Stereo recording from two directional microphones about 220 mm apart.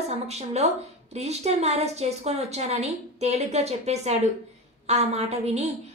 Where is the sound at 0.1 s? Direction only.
30° right (ahead or behind).